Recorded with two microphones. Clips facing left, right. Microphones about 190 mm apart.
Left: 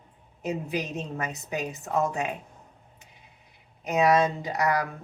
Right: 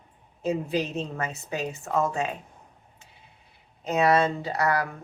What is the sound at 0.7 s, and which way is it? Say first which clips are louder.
Speech: right 3 dB; 15° left (ahead or behind).